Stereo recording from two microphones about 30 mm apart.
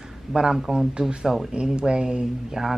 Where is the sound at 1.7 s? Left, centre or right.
Right.